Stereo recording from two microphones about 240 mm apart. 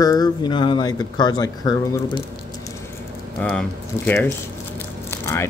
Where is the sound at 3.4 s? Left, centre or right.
Centre.